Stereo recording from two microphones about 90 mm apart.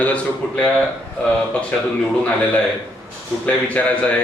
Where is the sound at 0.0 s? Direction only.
15° left (ahead or behind).